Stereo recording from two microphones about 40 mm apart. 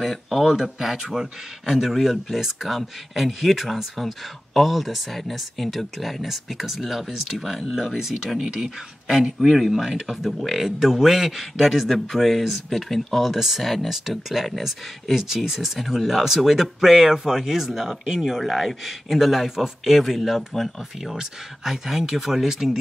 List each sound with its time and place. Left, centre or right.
0.0 s speech: centre
9.4 s speech: centre
18.4 s speech: centre